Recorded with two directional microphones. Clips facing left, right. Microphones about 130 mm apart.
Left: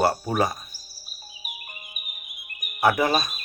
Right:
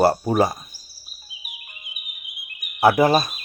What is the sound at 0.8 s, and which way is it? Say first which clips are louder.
Music: left 4 dB; 40° left (ahead or behind).